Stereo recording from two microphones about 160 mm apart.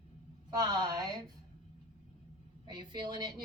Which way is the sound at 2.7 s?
30° right (ahead or behind).